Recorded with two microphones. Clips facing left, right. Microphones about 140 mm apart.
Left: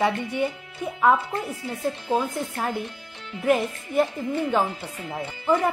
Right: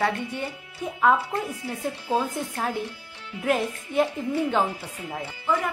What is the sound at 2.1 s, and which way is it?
A woman's voice, centre (ahead or behind).